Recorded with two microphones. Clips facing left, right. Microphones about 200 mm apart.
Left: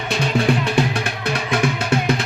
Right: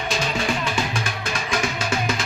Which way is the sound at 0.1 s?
60° left (ahead or behind).